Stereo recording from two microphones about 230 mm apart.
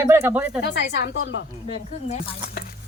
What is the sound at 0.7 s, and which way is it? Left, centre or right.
Speech, left.